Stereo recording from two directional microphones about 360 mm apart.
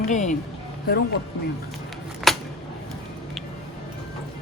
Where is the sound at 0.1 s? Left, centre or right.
Centre.